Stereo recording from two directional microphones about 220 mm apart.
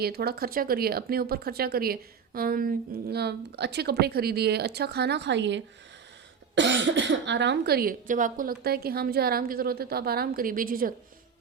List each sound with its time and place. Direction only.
0.0 s speech: 45° right (ahead or behind)